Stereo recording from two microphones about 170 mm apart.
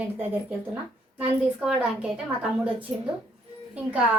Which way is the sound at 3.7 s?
5° right (ahead or behind).